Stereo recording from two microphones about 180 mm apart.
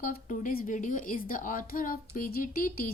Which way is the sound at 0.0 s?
50° left (ahead or behind).